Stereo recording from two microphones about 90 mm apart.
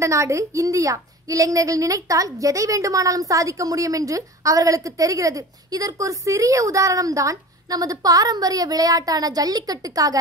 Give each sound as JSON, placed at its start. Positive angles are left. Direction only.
{"t": 0.0, "sound": "a woman's voice", "side_deg": -35}